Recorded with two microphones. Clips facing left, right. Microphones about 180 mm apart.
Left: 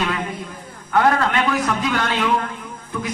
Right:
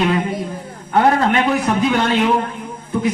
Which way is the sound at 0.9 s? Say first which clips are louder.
Right 3 dB; 30° right (ahead or behind).